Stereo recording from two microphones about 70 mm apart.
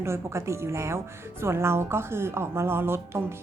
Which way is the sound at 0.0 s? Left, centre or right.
Right.